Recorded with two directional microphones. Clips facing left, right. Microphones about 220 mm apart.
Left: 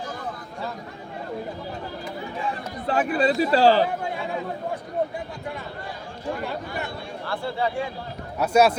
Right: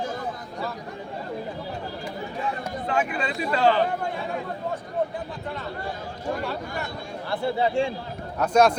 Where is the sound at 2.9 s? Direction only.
35° left (ahead or behind).